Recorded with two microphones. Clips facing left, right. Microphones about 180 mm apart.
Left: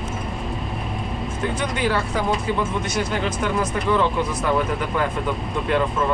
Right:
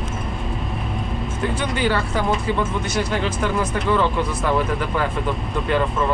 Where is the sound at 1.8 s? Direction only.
Centre (ahead or behind).